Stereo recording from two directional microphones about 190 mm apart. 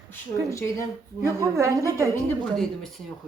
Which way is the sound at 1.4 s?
15° right (ahead or behind).